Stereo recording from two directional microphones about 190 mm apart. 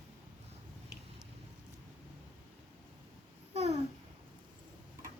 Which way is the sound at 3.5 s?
35° right (ahead or behind).